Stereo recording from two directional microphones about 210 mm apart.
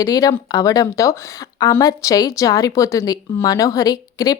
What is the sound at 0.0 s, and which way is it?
A woman's voice, 15° left (ahead or behind).